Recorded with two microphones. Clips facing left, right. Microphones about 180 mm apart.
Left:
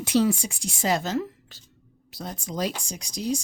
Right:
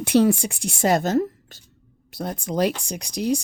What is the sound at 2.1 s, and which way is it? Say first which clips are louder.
Speech: right 7 dB; 60° right (ahead or behind).